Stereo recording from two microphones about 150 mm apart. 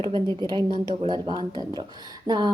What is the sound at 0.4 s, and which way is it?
A woman's voice, 30° right (ahead or behind).